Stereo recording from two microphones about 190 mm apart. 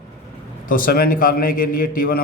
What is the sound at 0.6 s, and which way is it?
A man's voice, 45° left (ahead or behind).